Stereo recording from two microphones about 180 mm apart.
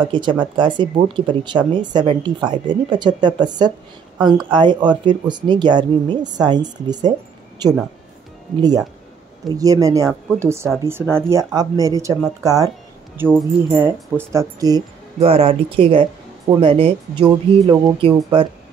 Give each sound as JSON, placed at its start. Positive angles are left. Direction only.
{"t": 0.0, "sound": "speech", "side_deg": -25}
{"t": 15.1, "sound": "speech", "side_deg": -30}